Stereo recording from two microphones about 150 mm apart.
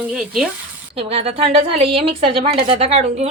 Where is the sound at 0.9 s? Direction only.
40° right (ahead or behind).